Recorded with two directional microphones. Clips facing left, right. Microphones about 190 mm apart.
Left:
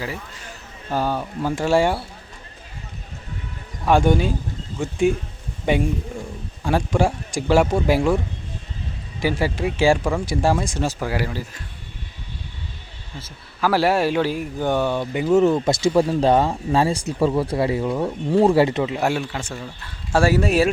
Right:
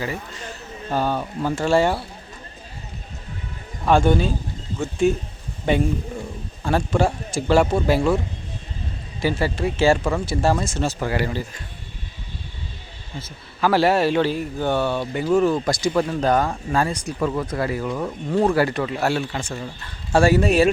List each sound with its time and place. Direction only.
0.9 s speech: 10° left (ahead or behind)
3.8 s speech: 15° left (ahead or behind)
9.2 s speech: 10° left (ahead or behind)
13.2 s speech: 5° left (ahead or behind)
19.3 s speech: 5° left (ahead or behind)